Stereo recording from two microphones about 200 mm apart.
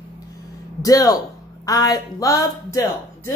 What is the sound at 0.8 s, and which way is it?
A woman's voice, 20° left (ahead or behind).